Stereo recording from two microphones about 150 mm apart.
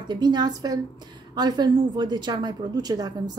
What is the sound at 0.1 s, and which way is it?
A woman's voice, 30° right (ahead or behind).